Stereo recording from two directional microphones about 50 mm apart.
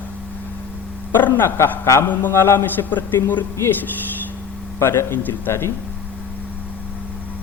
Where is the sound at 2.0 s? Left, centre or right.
Left.